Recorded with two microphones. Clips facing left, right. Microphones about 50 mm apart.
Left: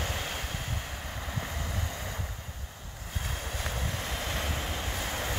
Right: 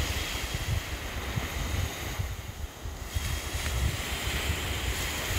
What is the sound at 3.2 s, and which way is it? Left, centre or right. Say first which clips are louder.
Waves: left 1 dB; centre.